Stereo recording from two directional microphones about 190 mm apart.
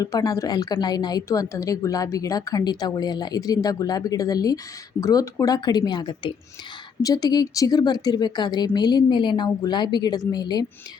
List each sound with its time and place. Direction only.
0.0 s a woman's voice: 20° left (ahead or behind)